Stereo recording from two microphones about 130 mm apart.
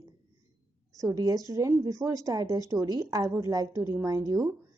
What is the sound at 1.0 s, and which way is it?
Speech, 30° right (ahead or behind).